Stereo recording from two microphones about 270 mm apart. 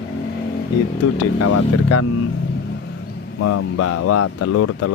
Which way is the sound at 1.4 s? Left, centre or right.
Left.